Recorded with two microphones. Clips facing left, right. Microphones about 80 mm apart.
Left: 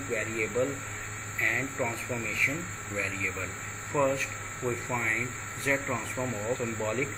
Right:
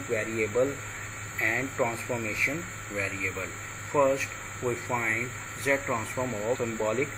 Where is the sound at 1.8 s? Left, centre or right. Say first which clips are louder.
Right 3 dB; centre.